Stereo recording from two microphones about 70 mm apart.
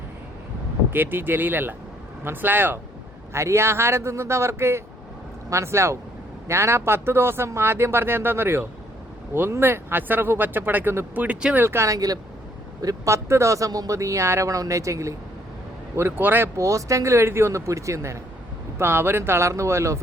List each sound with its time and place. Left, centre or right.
0.9 s speech: right
3.3 s speech: right
11.5 s speech: right
11.9 s speech: right
13.1 s speech: right
16.0 s speech: right
16.6 s speech: right
18.8 s speech: right